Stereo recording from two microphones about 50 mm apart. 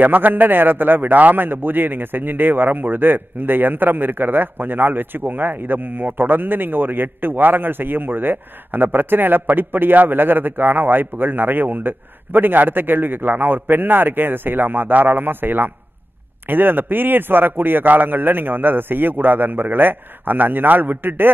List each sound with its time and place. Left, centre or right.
0.0 s a man's voice: right